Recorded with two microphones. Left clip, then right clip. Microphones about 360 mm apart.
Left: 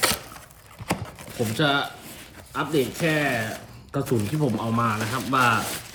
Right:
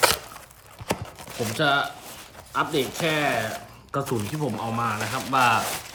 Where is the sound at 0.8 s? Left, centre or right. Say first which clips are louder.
Even; centre.